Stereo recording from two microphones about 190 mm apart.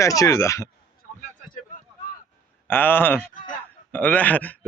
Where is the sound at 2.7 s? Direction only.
10° left (ahead or behind).